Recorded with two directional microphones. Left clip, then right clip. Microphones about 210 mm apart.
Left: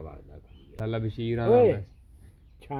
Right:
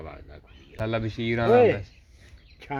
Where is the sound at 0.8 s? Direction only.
15° right (ahead or behind).